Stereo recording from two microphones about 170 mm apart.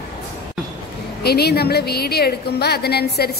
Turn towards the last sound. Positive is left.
turn(degrees=70)  # may be behind; listen again after turning